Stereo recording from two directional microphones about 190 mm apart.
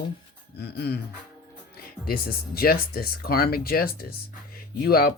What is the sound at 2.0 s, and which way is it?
Speech, 50° left (ahead or behind).